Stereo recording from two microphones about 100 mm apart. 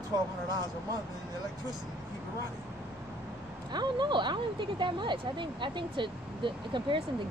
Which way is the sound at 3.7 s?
45° right (ahead or behind).